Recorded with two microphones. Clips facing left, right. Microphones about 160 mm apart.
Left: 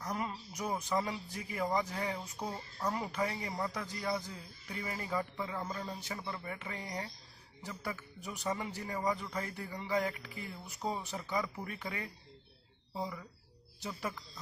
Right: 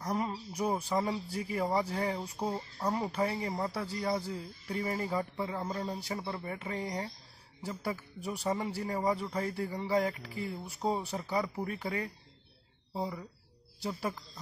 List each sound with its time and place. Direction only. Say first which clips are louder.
0.0 s a sound: right 5 dB; 35° right (ahead or behind)
0.8 s speech: right 3 dB; 30° right (ahead or behind)
8.5 s speech: right 4 dB; 35° right (ahead or behind)